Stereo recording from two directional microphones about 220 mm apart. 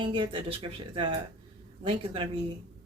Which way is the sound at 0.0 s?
25° right (ahead or behind).